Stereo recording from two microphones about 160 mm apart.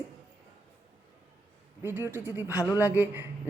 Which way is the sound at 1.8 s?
10° right (ahead or behind).